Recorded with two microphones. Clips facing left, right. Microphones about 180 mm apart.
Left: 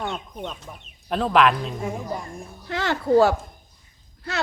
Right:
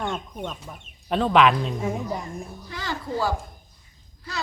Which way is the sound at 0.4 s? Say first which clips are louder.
Even; 5° right (ahead or behind).